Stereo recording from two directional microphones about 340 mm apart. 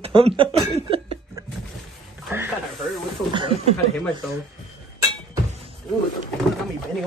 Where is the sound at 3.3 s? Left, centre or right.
Centre.